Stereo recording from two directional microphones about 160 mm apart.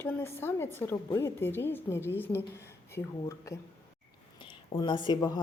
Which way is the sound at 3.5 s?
20° left (ahead or behind).